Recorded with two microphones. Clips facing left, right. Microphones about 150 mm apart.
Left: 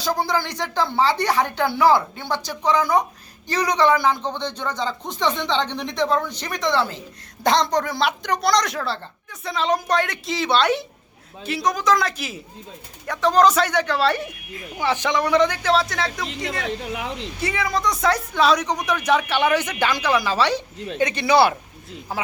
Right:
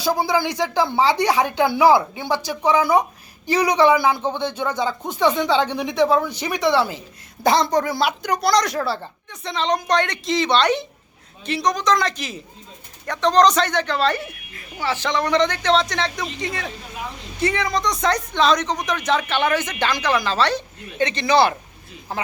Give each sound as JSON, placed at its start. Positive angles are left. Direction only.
{"t": 0.0, "sound": "speech", "side_deg": -10}
{"t": 16.5, "sound": "speech", "side_deg": 85}
{"t": 17.4, "sound": "speech", "side_deg": 5}